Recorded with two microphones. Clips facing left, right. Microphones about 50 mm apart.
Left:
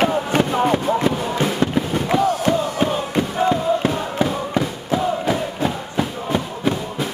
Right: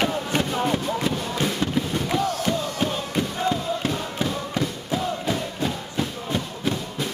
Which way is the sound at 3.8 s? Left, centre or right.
Centre.